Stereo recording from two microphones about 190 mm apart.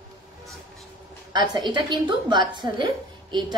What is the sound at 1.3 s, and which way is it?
Speech, 25° right (ahead or behind).